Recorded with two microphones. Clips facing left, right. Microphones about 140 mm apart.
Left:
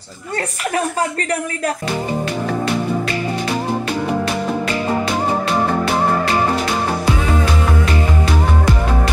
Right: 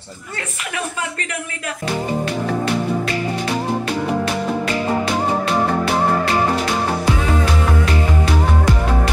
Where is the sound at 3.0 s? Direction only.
Centre (ahead or behind).